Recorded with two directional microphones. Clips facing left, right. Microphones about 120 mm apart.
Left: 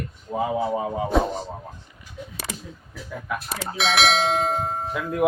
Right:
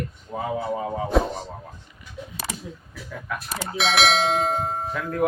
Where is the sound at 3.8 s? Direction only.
Centre (ahead or behind).